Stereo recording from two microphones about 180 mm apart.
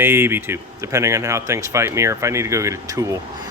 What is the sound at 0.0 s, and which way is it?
A man's voice, 10° right (ahead or behind).